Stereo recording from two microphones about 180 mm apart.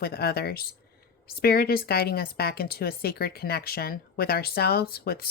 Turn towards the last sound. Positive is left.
turn(degrees=60)  # may be behind; listen again after turning